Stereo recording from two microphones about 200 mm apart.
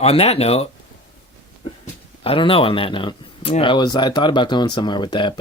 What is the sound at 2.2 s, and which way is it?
Speech, 30° left (ahead or behind).